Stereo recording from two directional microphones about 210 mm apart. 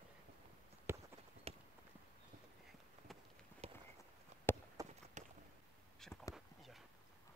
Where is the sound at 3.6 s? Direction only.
30° right (ahead or behind).